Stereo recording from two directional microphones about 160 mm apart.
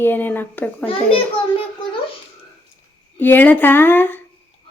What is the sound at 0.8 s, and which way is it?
Speech, 35° left (ahead or behind).